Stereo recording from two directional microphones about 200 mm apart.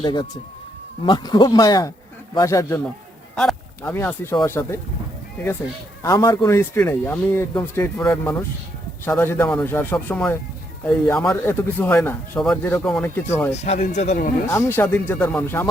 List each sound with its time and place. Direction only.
0.0 s speech: 20° left (ahead or behind)
6.0 s speech: 15° left (ahead or behind)
13.5 s speech: 35° left (ahead or behind)
14.4 s speech: 15° left (ahead or behind)